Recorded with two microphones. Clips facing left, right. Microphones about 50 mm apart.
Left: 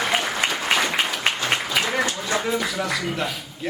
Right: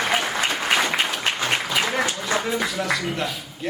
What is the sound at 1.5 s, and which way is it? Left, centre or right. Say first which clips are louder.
Applause: even; right.